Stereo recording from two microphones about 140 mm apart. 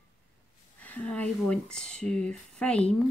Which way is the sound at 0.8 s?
10° left (ahead or behind).